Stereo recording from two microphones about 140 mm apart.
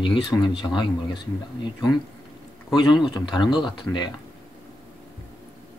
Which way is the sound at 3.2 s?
35° left (ahead or behind).